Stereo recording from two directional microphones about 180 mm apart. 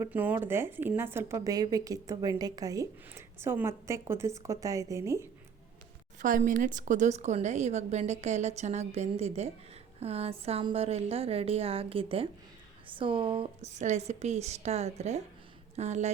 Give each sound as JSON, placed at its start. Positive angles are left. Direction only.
{"t": 0.0, "sound": "a woman's voice", "side_deg": -10}
{"t": 6.1, "sound": "speech", "side_deg": -45}